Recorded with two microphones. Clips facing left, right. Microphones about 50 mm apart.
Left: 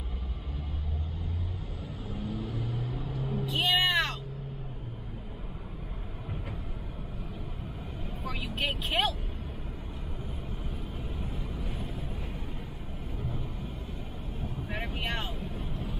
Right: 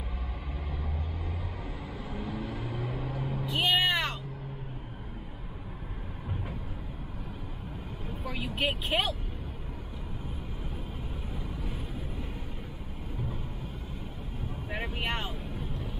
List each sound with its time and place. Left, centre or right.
2.0 s vehicle: right
2.9 s vehicle: right
3.4 s vehicle: centre
8.3 s vehicle: centre
14.7 s vehicle: centre